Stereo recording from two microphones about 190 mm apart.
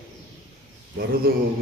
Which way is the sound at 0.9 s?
50° right (ahead or behind).